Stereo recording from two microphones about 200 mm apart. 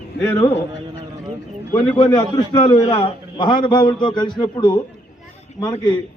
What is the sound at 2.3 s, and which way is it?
A man's voice, 20° left (ahead or behind).